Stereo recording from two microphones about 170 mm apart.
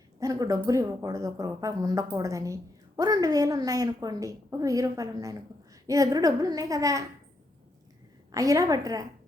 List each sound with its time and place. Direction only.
0.2 s a woman's voice: 20° right (ahead or behind)
8.3 s a woman's voice: 20° right (ahead or behind)